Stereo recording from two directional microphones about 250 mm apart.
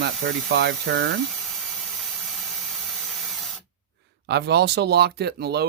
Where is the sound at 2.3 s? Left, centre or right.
Centre.